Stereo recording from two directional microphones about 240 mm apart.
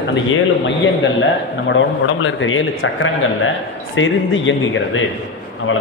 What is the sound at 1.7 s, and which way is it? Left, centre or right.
A man's voice, left.